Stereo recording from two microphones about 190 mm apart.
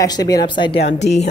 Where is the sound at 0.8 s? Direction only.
35° left (ahead or behind).